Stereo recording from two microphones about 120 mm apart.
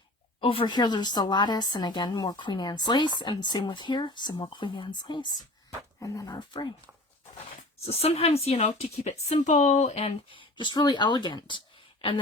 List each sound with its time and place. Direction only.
0.3 s a woman's voice: 45° left (ahead or behind)
7.9 s a woman's voice: 60° left (ahead or behind)
10.3 s a woman's voice: 40° left (ahead or behind)